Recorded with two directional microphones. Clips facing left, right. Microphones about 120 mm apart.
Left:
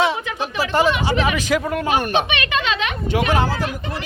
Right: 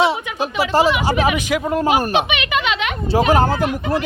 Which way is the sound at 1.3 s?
10° right (ahead or behind).